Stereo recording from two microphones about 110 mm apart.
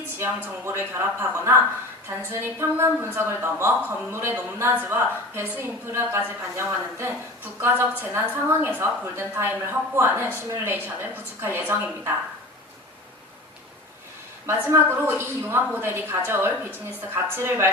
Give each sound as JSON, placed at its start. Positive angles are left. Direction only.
{"t": 0.2, "sound": "a woman's voice", "side_deg": -20}
{"t": 14.4, "sound": "a woman's voice", "side_deg": -25}